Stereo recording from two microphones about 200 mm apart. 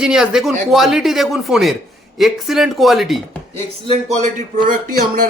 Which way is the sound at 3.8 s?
30° right (ahead or behind).